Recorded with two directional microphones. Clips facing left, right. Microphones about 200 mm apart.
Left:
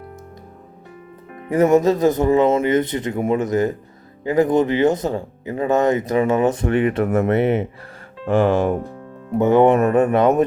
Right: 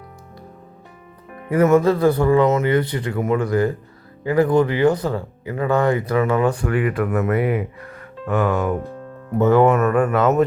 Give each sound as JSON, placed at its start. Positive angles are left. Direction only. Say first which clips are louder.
{"t": 1.5, "sound": "speech", "louder": "even", "side_deg": 20}